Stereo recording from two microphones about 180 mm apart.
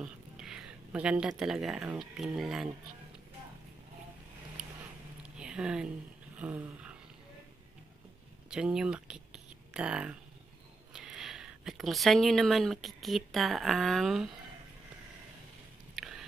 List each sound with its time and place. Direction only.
0.0 s speech: 5° right (ahead or behind)
5.4 s a sound: 5° right (ahead or behind)
6.3 s dog: 10° right (ahead or behind)
8.5 s speech: 5° right (ahead or behind)
16.0 s biting: centre (ahead or behind)